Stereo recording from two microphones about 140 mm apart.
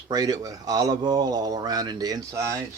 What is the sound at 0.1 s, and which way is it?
Speech, 25° right (ahead or behind).